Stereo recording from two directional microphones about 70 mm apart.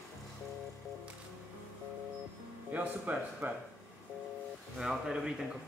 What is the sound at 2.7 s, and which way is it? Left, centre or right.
Speech, right.